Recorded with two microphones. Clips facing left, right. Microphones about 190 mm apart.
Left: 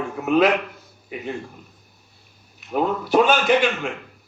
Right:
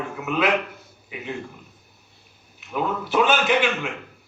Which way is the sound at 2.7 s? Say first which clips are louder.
Left 4 dB; 40° left (ahead or behind).